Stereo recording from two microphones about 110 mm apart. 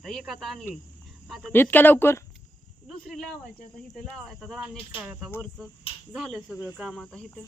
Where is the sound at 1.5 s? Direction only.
15° left (ahead or behind).